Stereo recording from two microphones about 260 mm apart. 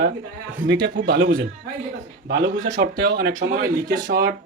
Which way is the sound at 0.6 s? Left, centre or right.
Right.